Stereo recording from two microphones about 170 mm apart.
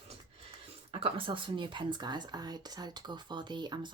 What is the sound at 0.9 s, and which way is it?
Speech, 30° right (ahead or behind).